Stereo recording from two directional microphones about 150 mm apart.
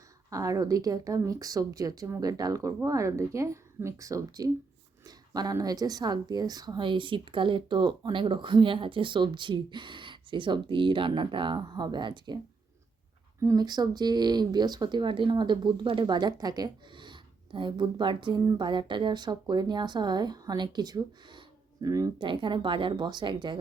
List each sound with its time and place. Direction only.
0.3 s a woman's voice: 20° right (ahead or behind)
13.4 s speech: 25° right (ahead or behind)